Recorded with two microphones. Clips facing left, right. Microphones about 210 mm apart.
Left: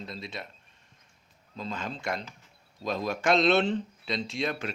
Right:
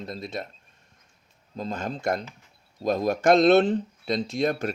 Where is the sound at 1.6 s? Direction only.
45° right (ahead or behind).